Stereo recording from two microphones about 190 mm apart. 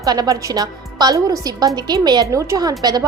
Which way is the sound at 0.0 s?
20° right (ahead or behind).